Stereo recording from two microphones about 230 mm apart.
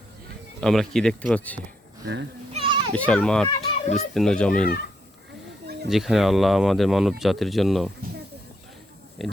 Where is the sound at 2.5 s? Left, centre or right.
Right.